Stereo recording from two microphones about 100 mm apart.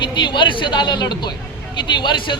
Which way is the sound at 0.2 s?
50° left (ahead or behind).